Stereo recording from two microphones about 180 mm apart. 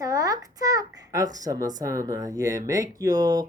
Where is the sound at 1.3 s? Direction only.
20° right (ahead or behind).